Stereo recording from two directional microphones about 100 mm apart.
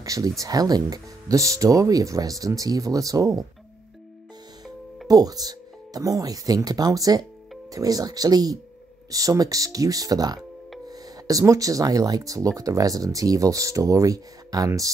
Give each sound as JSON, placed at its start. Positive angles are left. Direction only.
{"t": 0.0, "sound": "speech", "side_deg": -35}
{"t": 5.0, "sound": "speech", "side_deg": -40}